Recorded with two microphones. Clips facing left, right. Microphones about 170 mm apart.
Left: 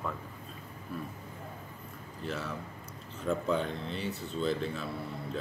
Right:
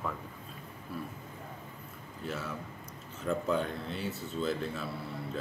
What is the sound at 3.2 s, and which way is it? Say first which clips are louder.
Speech: even; centre (ahead or behind).